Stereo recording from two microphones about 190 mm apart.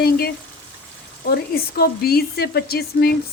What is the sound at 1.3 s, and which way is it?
Speech, 55° left (ahead or behind).